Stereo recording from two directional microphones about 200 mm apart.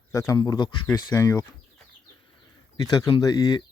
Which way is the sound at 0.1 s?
15° left (ahead or behind).